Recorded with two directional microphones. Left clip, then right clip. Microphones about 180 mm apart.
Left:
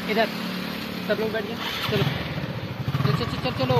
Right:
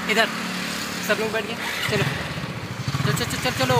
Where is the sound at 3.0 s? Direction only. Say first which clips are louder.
Right 3 dB; centre (ahead or behind).